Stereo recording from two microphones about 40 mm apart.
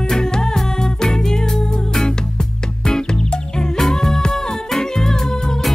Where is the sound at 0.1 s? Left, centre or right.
Centre.